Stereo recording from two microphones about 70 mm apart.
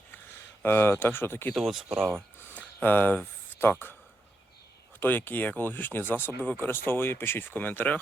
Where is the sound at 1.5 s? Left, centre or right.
Centre.